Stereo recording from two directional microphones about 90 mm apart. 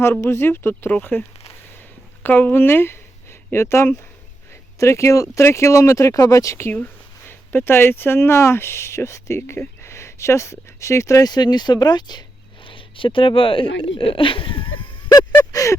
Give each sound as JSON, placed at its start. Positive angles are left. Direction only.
{"t": 0.0, "sound": "speech", "side_deg": 30}
{"t": 2.2, "sound": "speech", "side_deg": 20}
{"t": 11.3, "sound": "speech", "side_deg": 50}
{"t": 12.6, "sound": "speech", "side_deg": 70}
{"t": 15.5, "sound": "a sound", "side_deg": 35}